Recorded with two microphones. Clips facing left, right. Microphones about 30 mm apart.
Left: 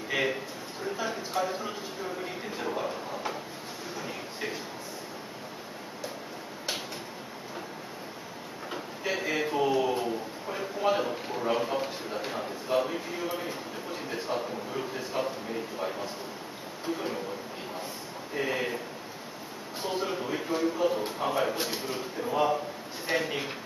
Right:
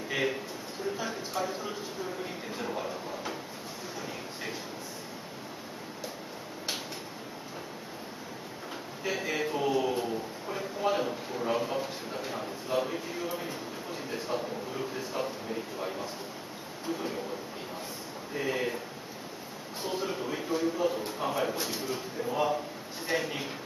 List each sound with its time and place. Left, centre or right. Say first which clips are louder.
0.1 s a man's voice: left 2 dB; centre
4.0 s a sound: left 3 dB; centre
9.0 s a sound: left 2 dB; centre
12.3 s a man's voice: left 3 dB; centre
18.3 s a man's voice: left 1 dB; centre
19.8 s a man's voice: left 2 dB; centre
21.5 s a man's voice: left 1 dB; left
21.9 s a man's voice: left 3 dB; centre